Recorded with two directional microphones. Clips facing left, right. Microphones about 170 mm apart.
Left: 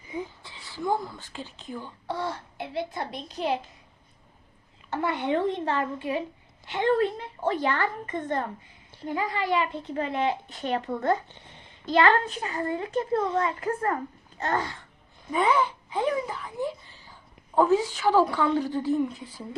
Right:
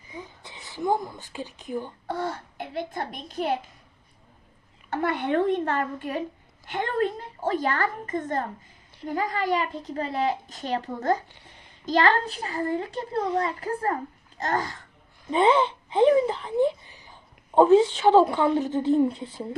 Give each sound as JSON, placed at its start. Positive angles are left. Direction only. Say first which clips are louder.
{"t": 0.4, "sound": "speech", "louder": "right 5 dB", "side_deg": -20}
{"t": 2.0, "sound": "a child's voice", "louder": "left 3 dB", "side_deg": -45}
{"t": 4.9, "sound": "a child's voice", "louder": "right 1 dB", "side_deg": -60}
{"t": 15.3, "sound": "speech", "louder": "right 4 dB", "side_deg": -25}